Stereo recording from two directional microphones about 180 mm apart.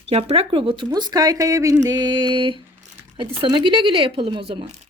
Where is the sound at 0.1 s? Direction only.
35° right (ahead or behind).